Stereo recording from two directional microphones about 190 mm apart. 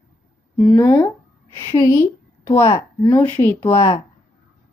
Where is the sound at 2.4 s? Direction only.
15° left (ahead or behind).